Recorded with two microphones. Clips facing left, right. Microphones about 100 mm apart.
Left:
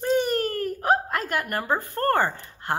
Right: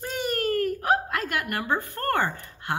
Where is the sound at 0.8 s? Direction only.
35° left (ahead or behind).